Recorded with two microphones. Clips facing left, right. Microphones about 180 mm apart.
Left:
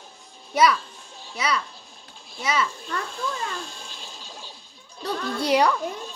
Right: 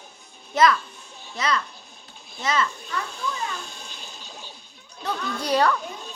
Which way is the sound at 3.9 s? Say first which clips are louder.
Even; centre (ahead or behind).